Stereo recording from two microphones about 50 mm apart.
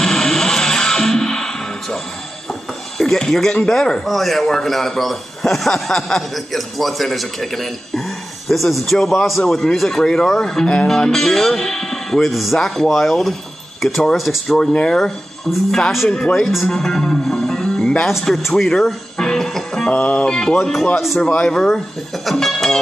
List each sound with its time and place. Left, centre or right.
0.0 s music: centre
3.0 s a man's voice: centre
14.6 s speech: centre
16.3 s speech: centre
17.3 s music: centre
18.3 s speech: centre
19.9 s speech: left
20.3 s speech: centre
21.5 s speech: centre